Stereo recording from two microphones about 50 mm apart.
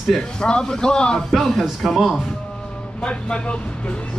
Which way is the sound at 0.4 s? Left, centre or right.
Centre.